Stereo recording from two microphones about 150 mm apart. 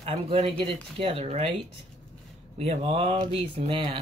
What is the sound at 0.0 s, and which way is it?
Speech, 45° right (ahead or behind).